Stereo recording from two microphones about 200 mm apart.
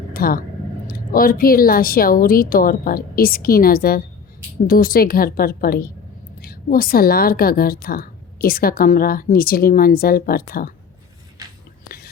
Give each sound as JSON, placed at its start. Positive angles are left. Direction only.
{"t": 0.1, "sound": "a woman's voice", "side_deg": 45}